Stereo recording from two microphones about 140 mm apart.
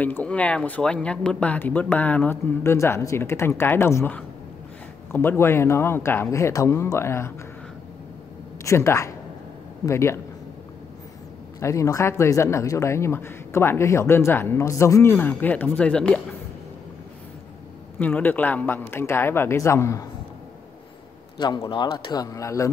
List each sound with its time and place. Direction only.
0.0 s speech: 10° left (ahead or behind)
8.6 s speech: 20° left (ahead or behind)
11.6 s speech: 20° left (ahead or behind)
17.9 s speech: 10° left (ahead or behind)
21.4 s speech: 30° left (ahead or behind)